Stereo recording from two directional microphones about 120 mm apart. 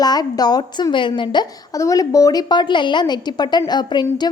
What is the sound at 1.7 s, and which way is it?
A woman's voice, 25° left (ahead or behind).